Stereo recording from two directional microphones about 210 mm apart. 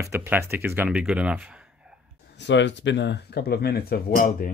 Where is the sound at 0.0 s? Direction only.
15° right (ahead or behind).